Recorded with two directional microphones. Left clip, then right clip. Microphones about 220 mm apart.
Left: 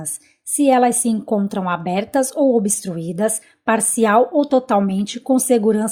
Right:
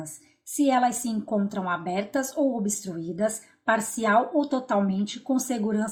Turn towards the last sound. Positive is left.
turn(degrees=40)  # may be behind; listen again after turning